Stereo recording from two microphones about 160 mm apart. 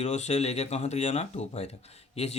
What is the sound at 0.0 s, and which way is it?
Speech, 45° left (ahead or behind).